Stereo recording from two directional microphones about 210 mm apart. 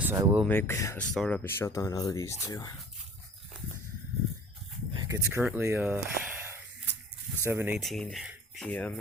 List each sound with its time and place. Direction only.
0.0 s speech: 10° right (ahead or behind)
0.4 s speech: 10° left (ahead or behind)
4.9 s a sound: 15° right (ahead or behind)
7.4 s speech: 10° right (ahead or behind)
7.8 s speech: centre (ahead or behind)